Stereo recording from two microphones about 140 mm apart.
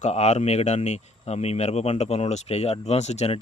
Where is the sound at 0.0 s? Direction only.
55° left (ahead or behind).